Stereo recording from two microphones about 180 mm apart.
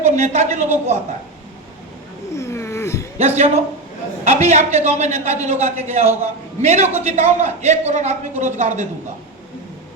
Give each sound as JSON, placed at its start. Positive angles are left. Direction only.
{"t": 0.0, "sound": "a man's voice", "side_deg": -40}
{"t": 2.3, "sound": "a sound", "side_deg": 15}
{"t": 3.2, "sound": "a man's voice", "side_deg": -35}